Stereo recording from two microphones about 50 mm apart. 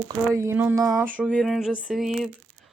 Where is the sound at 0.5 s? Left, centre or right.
Right.